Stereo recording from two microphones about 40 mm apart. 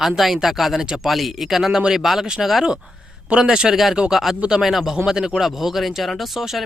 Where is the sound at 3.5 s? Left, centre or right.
Right.